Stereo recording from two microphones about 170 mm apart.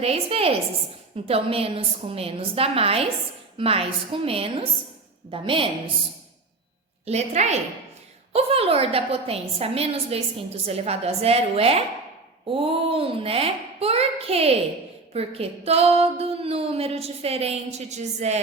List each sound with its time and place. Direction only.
0.0 s a woman's voice: 35° right (ahead or behind)
7.0 s a woman's voice: 40° right (ahead or behind)